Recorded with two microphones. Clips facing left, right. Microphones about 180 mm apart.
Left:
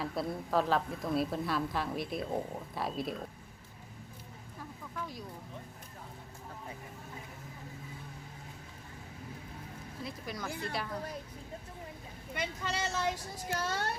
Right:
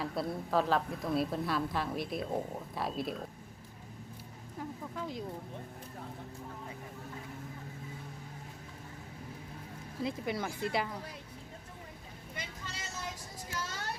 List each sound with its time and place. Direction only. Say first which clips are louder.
0.0 s a woman's voice: even; centre (ahead or behind)
4.9 s speech: right 2 dB; 25° right (ahead or behind)
10.2 s speech: right 4 dB; 25° right (ahead or behind)
12.3 s vehicle: left 9 dB; 70° left (ahead or behind)
13.5 s speech: left 6 dB; 65° left (ahead or behind)